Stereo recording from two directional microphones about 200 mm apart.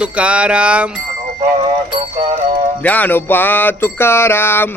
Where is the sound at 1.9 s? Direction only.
30° right (ahead or behind).